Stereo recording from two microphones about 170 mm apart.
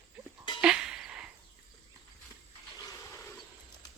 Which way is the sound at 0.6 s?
5° right (ahead or behind).